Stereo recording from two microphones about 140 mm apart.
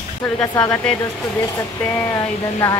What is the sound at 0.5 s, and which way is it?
Speech, 20° left (ahead or behind).